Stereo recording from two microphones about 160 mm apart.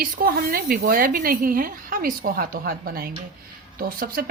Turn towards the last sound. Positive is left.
turn(degrees=-65)  # may be behind; listen again after turning